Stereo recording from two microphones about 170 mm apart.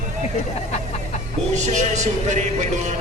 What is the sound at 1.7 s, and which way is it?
Speech, 45° right (ahead or behind).